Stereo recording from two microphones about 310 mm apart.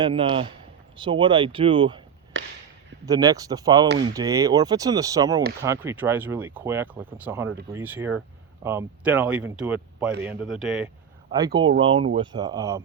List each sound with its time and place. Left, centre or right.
0.0 s speech: centre
2.3 s a sound: right
3.1 s speech: centre
11.3 s speech: centre